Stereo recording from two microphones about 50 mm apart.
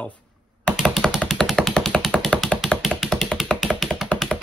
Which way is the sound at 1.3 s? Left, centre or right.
Centre.